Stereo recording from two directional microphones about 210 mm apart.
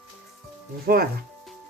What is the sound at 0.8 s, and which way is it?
Speech, 45° right (ahead or behind).